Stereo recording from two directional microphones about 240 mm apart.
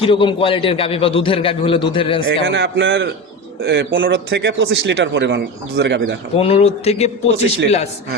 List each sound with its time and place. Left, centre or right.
0.0 s a man's voice: left
2.2 s speech: right
6.3 s a man's voice: left